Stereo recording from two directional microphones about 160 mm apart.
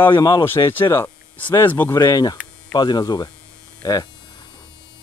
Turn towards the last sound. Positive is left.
turn(degrees=25)  # may be behind; listen again after turning